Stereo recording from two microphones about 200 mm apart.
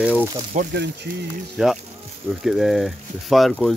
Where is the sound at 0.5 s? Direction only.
40° right (ahead or behind).